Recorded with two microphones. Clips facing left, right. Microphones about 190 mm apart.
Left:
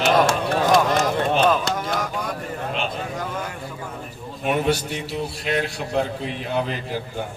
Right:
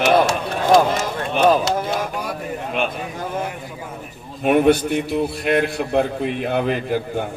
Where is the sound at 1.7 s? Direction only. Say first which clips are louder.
Right 3 dB; 30° right (ahead or behind).